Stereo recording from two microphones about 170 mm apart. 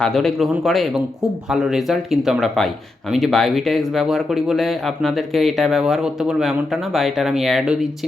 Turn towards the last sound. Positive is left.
turn(degrees=-5)  # may be behind; listen again after turning